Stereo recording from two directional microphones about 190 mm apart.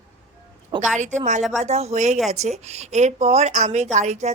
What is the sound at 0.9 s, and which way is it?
Speech, 40° right (ahead or behind).